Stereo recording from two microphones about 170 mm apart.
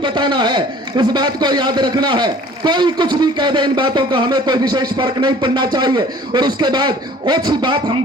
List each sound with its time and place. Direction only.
0.0 s a man's voice: 25° right (ahead or behind)